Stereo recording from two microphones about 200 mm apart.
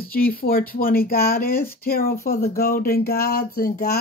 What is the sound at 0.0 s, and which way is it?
Speech, 45° left (ahead or behind).